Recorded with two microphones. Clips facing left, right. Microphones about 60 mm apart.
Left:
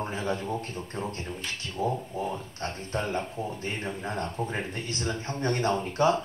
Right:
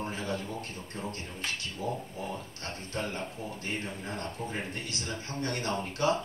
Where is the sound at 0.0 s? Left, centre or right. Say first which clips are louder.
Left 4 dB; left.